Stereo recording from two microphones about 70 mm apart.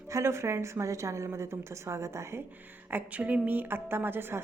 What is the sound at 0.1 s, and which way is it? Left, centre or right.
A woman's voice, right.